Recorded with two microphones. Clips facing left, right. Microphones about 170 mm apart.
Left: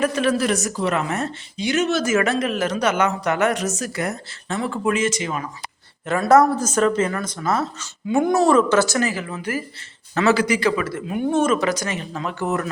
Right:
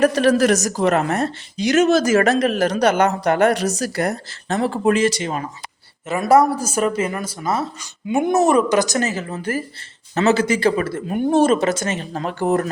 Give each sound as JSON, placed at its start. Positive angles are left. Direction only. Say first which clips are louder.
{"t": 0.0, "sound": "speech", "louder": "right 5 dB", "side_deg": -40}
{"t": 6.1, "sound": "speech", "louder": "even", "side_deg": -10}